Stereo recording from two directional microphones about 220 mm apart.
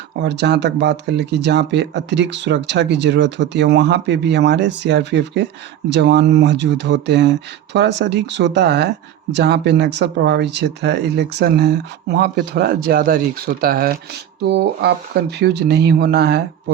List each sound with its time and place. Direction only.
0.2 s speech: 50° right (ahead or behind)